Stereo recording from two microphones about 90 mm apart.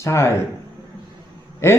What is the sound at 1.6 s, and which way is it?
Speech, 30° left (ahead or behind).